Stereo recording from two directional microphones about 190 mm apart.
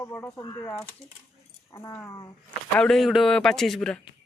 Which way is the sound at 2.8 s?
Centre (ahead or behind).